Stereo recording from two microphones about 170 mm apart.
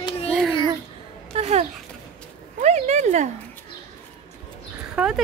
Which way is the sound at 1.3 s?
40° right (ahead or behind).